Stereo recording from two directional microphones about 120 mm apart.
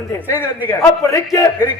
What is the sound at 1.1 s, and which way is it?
Speech, 25° left (ahead or behind).